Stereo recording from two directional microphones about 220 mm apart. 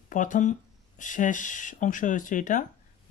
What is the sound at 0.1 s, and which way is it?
Speech, 35° left (ahead or behind).